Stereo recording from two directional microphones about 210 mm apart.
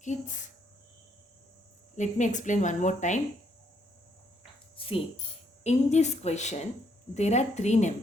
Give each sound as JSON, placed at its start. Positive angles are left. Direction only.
{"t": 2.0, "sound": "a woman's voice", "side_deg": 35}
{"t": 4.8, "sound": "tambourine", "side_deg": 25}
{"t": 5.6, "sound": "a woman's voice", "side_deg": 30}